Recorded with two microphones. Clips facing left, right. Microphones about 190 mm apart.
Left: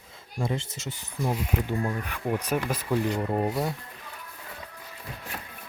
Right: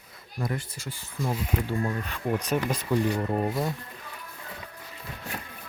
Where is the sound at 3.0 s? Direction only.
10° right (ahead or behind).